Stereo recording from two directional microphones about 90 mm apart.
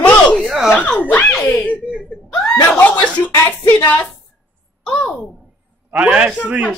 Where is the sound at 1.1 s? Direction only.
15° left (ahead or behind).